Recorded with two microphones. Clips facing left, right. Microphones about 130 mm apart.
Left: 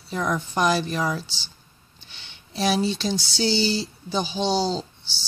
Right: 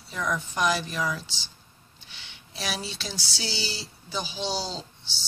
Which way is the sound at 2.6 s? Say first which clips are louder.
Left 11 dB; 25° left (ahead or behind).